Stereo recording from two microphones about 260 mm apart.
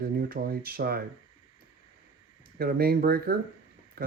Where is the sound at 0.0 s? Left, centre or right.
Right.